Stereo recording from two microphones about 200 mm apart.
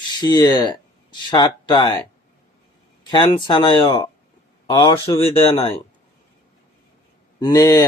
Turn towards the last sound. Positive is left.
turn(degrees=20)  # may be behind; listen again after turning